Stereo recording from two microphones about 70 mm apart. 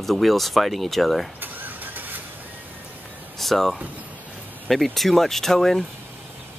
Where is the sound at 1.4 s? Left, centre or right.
Right.